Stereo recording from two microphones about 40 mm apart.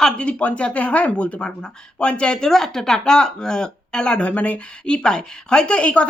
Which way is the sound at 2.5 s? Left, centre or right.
Centre.